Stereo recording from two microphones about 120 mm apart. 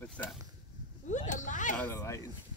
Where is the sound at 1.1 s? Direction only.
90° left.